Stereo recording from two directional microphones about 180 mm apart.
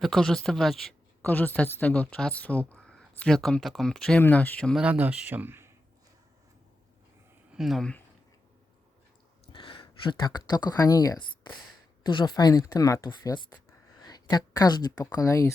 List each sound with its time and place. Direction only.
0.0 s speech: centre (ahead or behind)
4.8 s speech: 10° right (ahead or behind)
7.5 s speech: centre (ahead or behind)
9.5 s a woman's voice: 30° left (ahead or behind)